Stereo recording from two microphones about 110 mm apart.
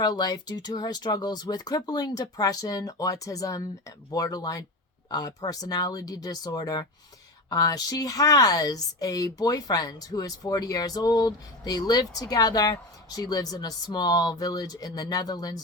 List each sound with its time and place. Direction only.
0.0 s speech: 35° left (ahead or behind)